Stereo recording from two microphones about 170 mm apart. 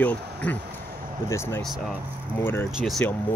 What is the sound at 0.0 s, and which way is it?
Speech, 10° left (ahead or behind).